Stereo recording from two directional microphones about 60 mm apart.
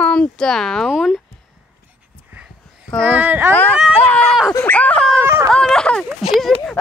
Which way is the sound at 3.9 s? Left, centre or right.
Left.